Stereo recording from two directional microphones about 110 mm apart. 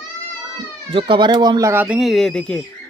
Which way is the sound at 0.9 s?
50° right (ahead or behind).